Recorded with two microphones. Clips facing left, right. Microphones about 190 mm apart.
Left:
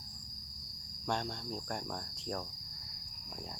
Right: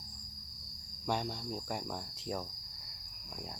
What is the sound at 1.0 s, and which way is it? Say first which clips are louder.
Cricket: right 1 dB; 5° right (ahead or behind).